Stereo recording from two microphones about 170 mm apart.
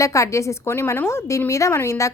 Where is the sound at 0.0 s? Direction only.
20° left (ahead or behind).